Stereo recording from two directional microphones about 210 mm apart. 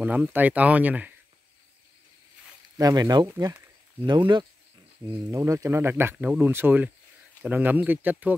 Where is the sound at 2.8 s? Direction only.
15° right (ahead or behind).